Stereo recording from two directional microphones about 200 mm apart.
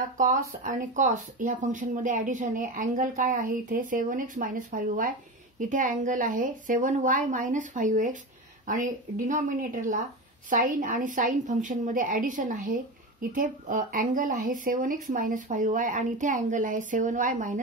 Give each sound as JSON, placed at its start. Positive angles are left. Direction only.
{"t": 0.2, "sound": "a woman's voice", "side_deg": -40}